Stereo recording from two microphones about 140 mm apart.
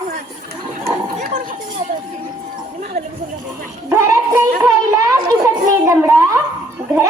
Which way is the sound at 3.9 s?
20° right (ahead or behind).